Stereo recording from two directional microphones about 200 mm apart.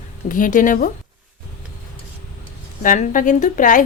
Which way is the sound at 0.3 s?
40° left (ahead or behind).